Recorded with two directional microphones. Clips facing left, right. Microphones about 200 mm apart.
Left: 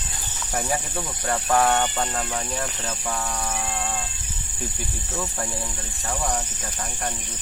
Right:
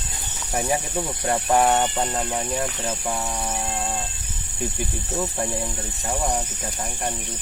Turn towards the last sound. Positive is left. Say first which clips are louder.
# right 2 dB
turn(degrees=-20)  # may be behind; listen again after turning